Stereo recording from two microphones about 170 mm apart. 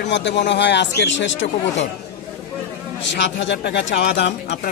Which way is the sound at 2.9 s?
90° left.